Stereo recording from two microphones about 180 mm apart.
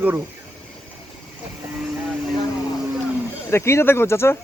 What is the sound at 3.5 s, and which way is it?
Speech, 15° left (ahead or behind).